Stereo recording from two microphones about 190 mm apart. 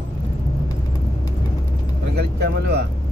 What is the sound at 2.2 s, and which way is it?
Speech, 60° right (ahead or behind).